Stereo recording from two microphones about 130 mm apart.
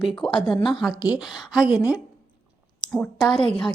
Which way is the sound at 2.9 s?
5° left (ahead or behind).